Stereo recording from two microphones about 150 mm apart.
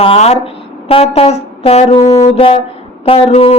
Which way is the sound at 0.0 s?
40° left (ahead or behind).